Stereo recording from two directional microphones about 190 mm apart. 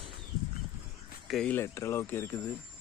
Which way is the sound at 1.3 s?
5° left (ahead or behind).